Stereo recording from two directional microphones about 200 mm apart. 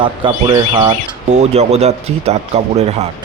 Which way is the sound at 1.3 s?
35° right (ahead or behind).